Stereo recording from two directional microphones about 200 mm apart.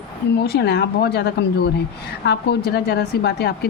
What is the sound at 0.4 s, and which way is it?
A woman's voice, 55° left (ahead or behind).